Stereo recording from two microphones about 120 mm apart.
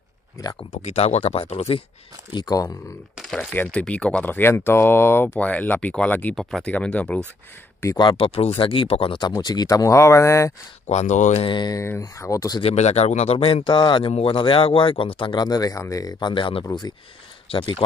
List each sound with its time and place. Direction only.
0.7 s speech: 65° left (ahead or behind)
2.3 s speech: 35° left (ahead or behind)
3.2 s speech: centre (ahead or behind)
8.0 s speech: 40° left (ahead or behind)
8.3 s speech: 55° left (ahead or behind); by 10.5 s 25° left (ahead or behind)
10.9 s speech: 75° left (ahead or behind)
11.4 s speech: 40° left (ahead or behind)
11.7 s speech: 25° left (ahead or behind)
12.6 s speech: 65° left (ahead or behind); by 17.8 s 45° left (ahead or behind)